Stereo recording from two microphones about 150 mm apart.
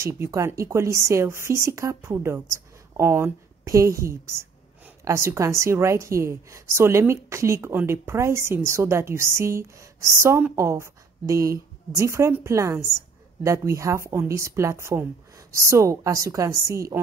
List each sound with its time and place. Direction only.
0.0 s a woman's voice: 20° right (ahead or behind)